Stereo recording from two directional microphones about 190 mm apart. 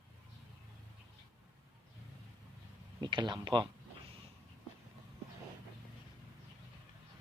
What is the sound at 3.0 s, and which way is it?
Speech, 25° right (ahead or behind).